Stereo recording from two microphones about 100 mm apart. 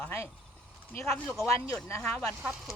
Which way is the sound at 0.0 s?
25° left (ahead or behind).